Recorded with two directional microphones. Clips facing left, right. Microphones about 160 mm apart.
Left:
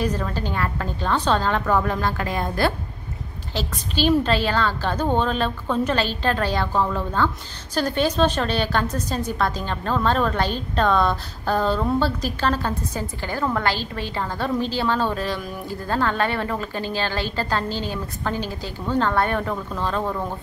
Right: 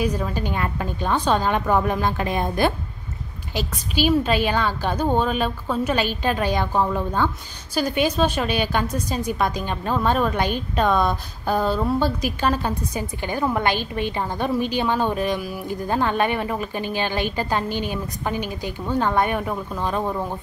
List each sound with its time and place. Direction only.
0.0 s a woman's voice: 10° right (ahead or behind)